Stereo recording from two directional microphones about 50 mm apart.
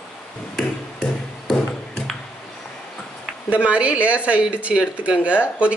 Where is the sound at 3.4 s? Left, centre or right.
Right.